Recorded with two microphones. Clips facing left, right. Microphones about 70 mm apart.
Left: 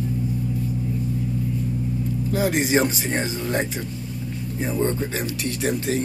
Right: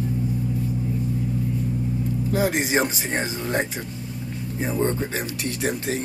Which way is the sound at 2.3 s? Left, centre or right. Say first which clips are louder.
Left 1 dB; centre.